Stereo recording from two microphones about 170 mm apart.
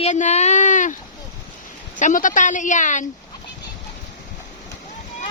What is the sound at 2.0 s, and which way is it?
A woman's voice, 50° left (ahead or behind).